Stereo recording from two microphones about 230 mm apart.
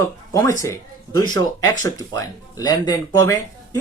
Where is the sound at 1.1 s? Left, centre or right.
Centre.